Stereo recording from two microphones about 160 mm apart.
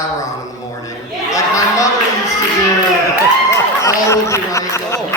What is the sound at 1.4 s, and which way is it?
Speech, 20° left (ahead or behind).